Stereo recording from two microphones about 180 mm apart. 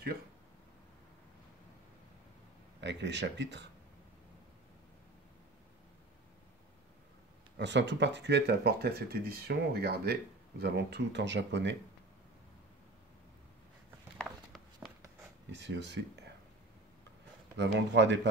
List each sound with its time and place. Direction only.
2.8 s speech: 75° right (ahead or behind)
7.5 s speech: 75° right (ahead or behind)
14.1 s a sound: centre (ahead or behind)
15.5 s speech: 75° right (ahead or behind)
17.6 s speech: 75° right (ahead or behind)